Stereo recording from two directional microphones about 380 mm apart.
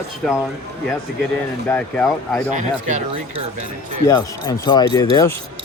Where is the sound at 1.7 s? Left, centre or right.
Centre.